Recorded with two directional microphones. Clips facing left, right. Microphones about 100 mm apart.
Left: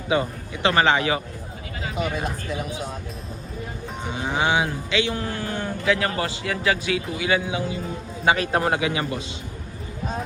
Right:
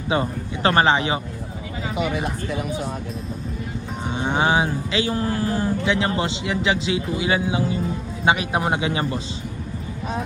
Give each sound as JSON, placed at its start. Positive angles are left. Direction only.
{"t": 0.1, "sound": "speech", "side_deg": -35}
{"t": 2.0, "sound": "speech", "side_deg": -10}
{"t": 4.2, "sound": "speech", "side_deg": -30}
{"t": 8.2, "sound": "speech", "side_deg": -20}
{"t": 8.8, "sound": "speech", "side_deg": -30}